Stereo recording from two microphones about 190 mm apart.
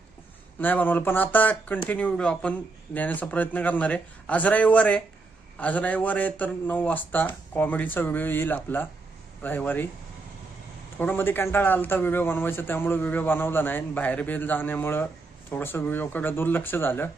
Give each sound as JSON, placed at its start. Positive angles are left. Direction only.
{"t": 0.6, "sound": "a man's voice", "side_deg": 10}
{"t": 10.9, "sound": "a man's voice", "side_deg": 10}